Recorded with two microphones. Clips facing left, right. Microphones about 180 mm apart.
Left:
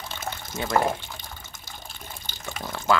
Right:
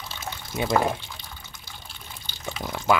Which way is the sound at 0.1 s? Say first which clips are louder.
Left 2 dB; 50° left (ahead or behind).